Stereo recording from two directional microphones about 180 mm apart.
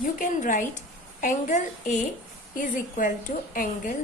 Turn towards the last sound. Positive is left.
turn(degrees=50)  # may be behind; listen again after turning